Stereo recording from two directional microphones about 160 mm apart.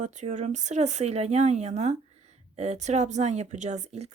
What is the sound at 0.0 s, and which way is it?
Speech, 50° right (ahead or behind).